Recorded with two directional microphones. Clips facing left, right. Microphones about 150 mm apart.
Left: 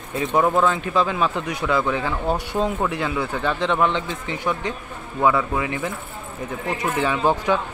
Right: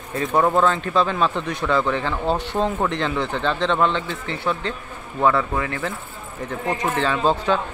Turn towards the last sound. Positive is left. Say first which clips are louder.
# even
turn(degrees=15)  # may be behind; listen again after turning